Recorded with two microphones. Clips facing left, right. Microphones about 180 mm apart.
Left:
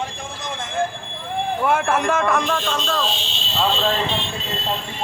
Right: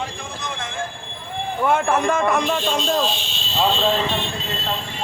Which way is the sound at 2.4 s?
15° right (ahead or behind).